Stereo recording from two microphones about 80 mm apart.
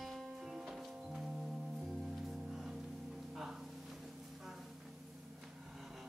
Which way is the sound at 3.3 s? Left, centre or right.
Centre.